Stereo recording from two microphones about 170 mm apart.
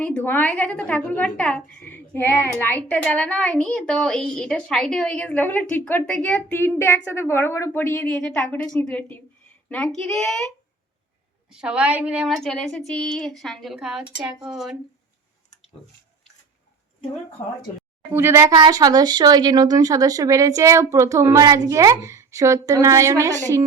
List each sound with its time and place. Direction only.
0.0 s a woman's voice: 10° left (ahead or behind)
11.5 s a woman's voice: 5° right (ahead or behind)
18.1 s speech: 15° right (ahead or behind)